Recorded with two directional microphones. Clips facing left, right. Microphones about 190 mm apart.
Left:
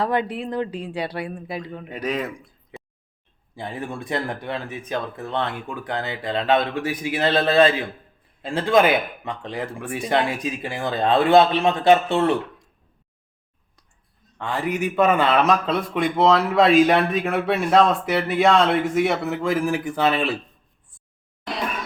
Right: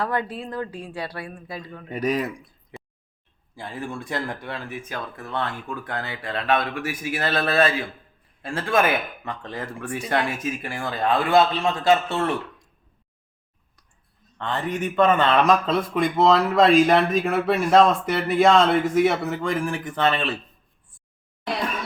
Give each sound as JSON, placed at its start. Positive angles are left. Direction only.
{"t": 0.0, "sound": "speech", "side_deg": 20}
{"t": 2.0, "sound": "speech", "side_deg": -10}
{"t": 3.5, "sound": "speech", "side_deg": 20}
{"t": 14.3, "sound": "speech", "side_deg": 10}